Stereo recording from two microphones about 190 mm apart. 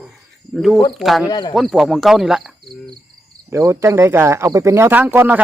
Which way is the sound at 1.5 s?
Centre (ahead or behind).